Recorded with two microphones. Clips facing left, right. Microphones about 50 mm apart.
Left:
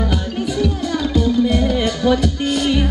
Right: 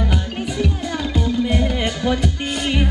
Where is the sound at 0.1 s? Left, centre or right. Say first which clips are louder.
Left 3 dB; right.